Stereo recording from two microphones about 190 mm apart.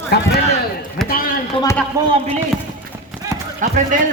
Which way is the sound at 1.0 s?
50° left (ahead or behind).